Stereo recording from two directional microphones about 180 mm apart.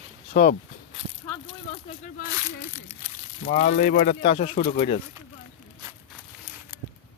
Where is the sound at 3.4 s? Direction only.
45° left (ahead or behind).